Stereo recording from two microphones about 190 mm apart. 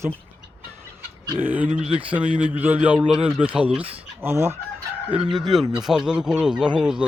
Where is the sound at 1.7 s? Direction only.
35° right (ahead or behind).